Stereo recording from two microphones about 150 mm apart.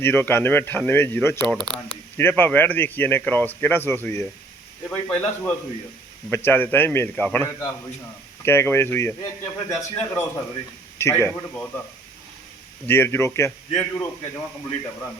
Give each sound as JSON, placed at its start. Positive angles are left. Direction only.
{"t": 0.0, "sound": "a man's voice", "side_deg": 15}
{"t": 12.9, "sound": "speech", "side_deg": 15}